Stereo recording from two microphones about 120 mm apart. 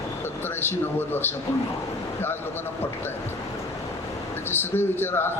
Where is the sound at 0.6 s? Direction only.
20° left (ahead or behind).